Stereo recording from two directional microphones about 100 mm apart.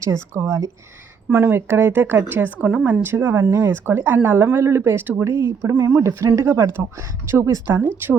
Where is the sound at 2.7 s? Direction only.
10° right (ahead or behind).